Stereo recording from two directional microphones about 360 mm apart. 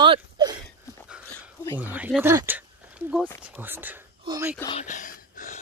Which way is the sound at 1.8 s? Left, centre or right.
Centre.